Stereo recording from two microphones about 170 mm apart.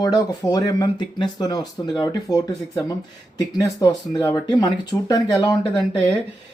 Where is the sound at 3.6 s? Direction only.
20° left (ahead or behind).